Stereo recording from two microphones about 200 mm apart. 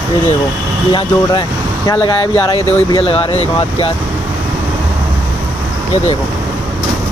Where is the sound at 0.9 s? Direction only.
20° left (ahead or behind).